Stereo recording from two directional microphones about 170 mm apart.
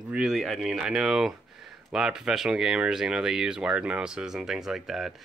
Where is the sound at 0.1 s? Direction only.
5° right (ahead or behind).